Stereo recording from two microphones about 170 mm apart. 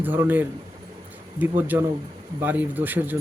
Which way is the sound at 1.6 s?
15° right (ahead or behind).